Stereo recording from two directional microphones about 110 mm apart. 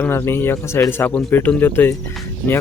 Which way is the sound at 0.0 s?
20° left (ahead or behind).